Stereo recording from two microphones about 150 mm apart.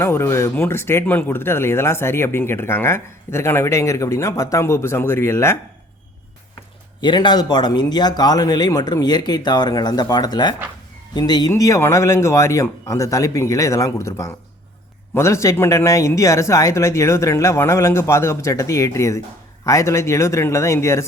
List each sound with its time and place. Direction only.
0.0 s speech: 15° left (ahead or behind)
7.0 s speech: 30° left (ahead or behind)